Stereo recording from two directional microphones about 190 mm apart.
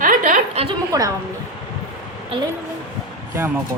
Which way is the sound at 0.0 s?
45° right (ahead or behind).